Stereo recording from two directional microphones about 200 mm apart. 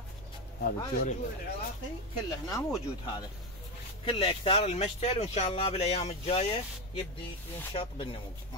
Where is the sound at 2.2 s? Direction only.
20° left (ahead or behind).